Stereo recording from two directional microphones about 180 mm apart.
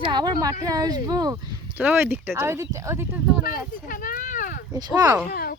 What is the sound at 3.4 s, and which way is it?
Speech, 50° left (ahead or behind).